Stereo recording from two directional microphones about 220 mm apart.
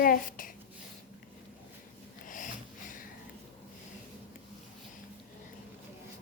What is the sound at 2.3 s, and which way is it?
Snort, 35° left (ahead or behind).